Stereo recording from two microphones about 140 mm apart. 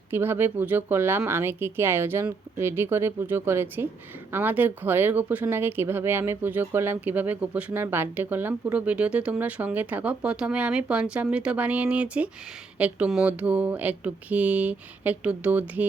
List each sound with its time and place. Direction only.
0.1 s speech: 15° right (ahead or behind)